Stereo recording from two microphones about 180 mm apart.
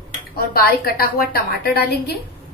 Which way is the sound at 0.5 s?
55° left (ahead or behind).